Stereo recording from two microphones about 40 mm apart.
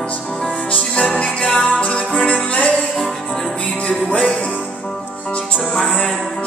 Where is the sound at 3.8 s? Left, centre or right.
Left.